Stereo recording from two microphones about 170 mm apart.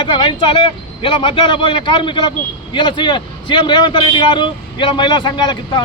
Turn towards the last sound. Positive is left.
turn(degrees=25)  # may be behind; listen again after turning